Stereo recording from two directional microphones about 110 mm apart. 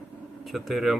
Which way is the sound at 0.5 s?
Centre (ahead or behind).